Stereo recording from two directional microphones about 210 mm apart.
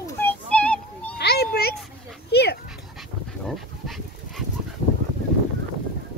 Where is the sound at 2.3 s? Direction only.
50° left (ahead or behind).